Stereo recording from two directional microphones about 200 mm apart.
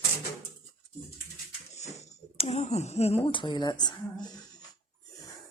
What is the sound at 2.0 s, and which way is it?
Speech, 35° left (ahead or behind).